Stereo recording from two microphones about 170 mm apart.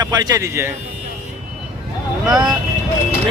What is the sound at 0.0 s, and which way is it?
Speech, 25° right (ahead or behind).